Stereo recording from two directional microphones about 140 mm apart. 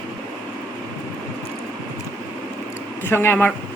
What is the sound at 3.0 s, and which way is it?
Speech, 15° left (ahead or behind).